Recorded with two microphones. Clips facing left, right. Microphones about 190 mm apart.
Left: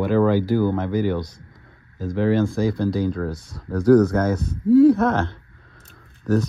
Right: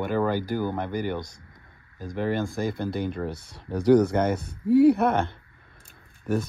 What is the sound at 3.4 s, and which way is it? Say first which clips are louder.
Speech: left 4 dB; 30° right (ahead or behind).